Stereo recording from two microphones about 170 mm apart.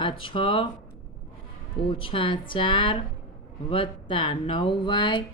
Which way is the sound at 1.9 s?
30° left (ahead or behind).